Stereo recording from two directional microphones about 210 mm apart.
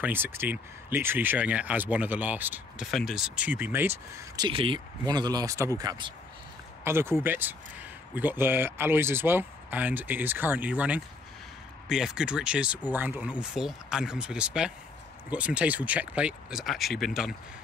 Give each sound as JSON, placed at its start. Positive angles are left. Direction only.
{"t": 0.0, "sound": "speech", "side_deg": -10}
{"t": 4.4, "sound": "speech", "side_deg": -25}